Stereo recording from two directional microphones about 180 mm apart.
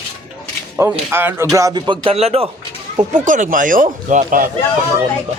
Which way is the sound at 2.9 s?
45° right (ahead or behind).